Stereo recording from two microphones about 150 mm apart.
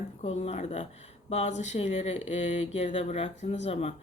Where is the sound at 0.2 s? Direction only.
45° left (ahead or behind).